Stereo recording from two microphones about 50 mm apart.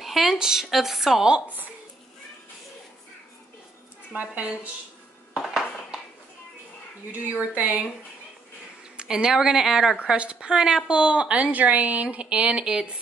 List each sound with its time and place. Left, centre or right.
0.0 s speech: centre
4.1 s speech: right
5.5 s a sound: centre
7.1 s speech: right
8.9 s a woman's voice: centre
11.4 s a woman's voice: right